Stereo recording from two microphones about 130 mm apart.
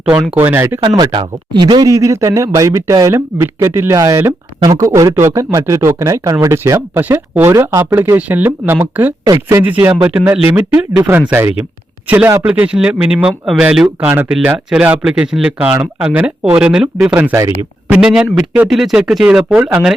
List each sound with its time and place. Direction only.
0.3 s speech: 15° right (ahead or behind)
0.8 s speech: 40° right (ahead or behind); by 19.9 s 10° right (ahead or behind)